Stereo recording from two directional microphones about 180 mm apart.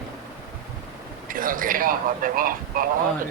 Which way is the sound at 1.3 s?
50° right (ahead or behind).